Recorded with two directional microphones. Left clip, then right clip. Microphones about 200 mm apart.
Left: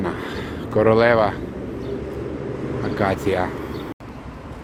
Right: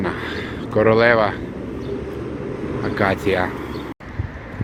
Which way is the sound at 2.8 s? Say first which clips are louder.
Right 2 dB; centre (ahead or behind).